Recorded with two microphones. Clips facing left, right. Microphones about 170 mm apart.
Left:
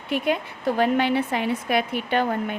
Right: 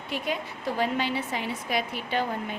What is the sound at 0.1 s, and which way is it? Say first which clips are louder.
Speech: left 7 dB; 60° left (ahead or behind).